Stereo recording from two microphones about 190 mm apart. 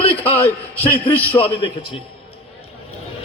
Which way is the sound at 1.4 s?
30° left (ahead or behind).